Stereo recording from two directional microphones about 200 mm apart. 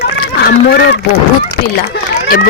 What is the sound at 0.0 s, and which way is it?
Run, 50° left (ahead or behind).